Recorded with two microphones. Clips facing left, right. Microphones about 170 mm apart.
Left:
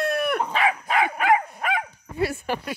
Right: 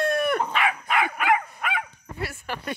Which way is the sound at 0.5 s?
35° left (ahead or behind).